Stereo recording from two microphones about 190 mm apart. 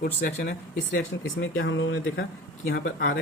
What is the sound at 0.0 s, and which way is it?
Speech, 50° left (ahead or behind).